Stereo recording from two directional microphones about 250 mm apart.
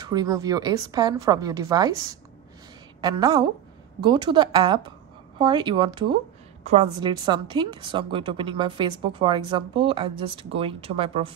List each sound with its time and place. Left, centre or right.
0.0 s a woman's voice: centre